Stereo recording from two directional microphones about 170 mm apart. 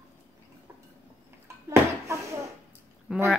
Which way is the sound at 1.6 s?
15° right (ahead or behind).